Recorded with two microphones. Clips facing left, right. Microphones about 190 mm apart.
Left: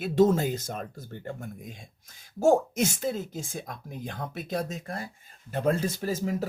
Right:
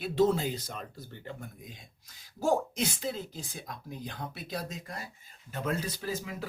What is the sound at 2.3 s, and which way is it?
Speech, 45° left (ahead or behind).